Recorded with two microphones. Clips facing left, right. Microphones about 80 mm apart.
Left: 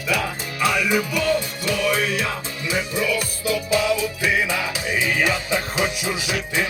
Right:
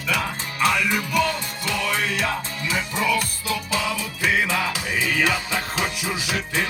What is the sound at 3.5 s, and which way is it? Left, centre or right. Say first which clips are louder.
Music: left 7 dB; centre.